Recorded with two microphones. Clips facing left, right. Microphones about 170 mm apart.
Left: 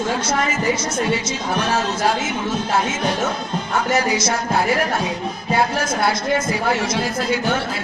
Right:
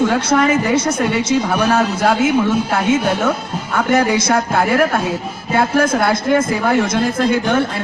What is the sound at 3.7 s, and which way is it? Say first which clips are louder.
A man's voice: right 5 dB; 55° right (ahead or behind).